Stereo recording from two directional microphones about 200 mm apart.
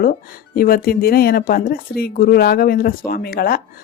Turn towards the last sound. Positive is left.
turn(degrees=50)  # may be behind; listen again after turning